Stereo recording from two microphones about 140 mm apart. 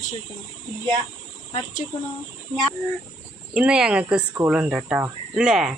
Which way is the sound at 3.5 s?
5° right (ahead or behind).